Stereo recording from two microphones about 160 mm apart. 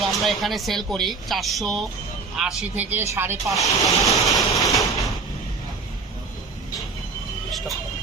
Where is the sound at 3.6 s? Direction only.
20° left (ahead or behind).